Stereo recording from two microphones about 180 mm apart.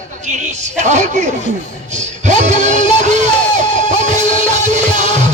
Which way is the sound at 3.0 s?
40° right (ahead or behind).